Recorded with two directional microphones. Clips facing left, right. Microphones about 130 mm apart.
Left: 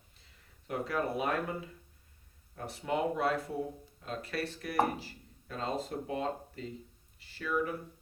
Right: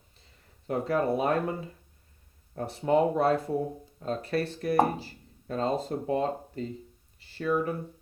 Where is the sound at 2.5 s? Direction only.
35° right (ahead or behind).